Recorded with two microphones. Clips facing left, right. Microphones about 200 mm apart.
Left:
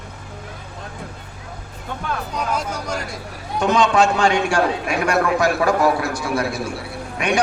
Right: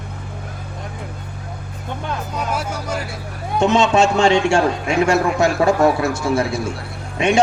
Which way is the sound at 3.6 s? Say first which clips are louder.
Right 2 dB; 25° right (ahead or behind).